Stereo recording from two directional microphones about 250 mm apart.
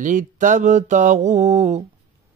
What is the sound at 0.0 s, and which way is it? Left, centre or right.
Mantra, right.